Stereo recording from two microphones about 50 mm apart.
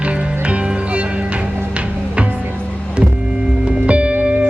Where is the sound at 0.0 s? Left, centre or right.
Right.